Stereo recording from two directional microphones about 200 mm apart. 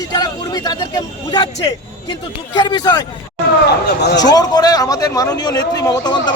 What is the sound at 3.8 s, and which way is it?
Speech, 55° left (ahead or behind).